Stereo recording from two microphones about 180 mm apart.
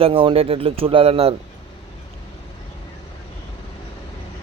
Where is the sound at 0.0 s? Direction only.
30° right (ahead or behind).